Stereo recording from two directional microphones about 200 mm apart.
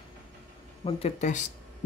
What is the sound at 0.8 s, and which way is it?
Speech, 30° left (ahead or behind).